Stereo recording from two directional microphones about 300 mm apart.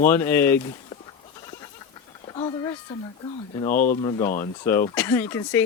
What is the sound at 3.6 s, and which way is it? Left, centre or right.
Speech, left.